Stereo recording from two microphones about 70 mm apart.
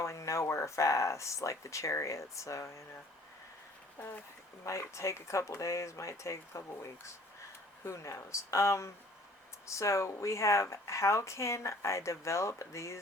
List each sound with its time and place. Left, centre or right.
0.0 s speech: left
4.6 s speech: left